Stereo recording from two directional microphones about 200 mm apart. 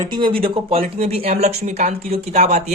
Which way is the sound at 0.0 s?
25° right (ahead or behind).